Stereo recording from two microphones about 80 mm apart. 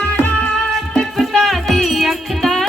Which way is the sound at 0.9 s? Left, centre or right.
Centre.